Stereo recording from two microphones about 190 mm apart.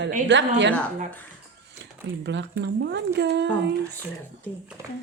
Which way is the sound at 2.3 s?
65° right (ahead or behind).